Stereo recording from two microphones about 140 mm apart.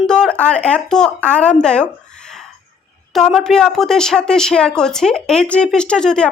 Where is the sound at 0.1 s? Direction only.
5° left (ahead or behind).